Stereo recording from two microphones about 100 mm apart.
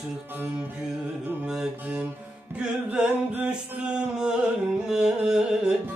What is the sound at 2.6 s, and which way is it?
Music, 10° right (ahead or behind).